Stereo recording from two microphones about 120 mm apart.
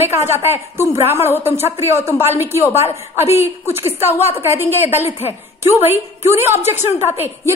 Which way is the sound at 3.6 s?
20° right (ahead or behind).